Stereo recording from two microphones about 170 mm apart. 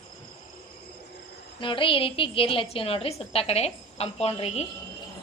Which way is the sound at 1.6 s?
30° left (ahead or behind).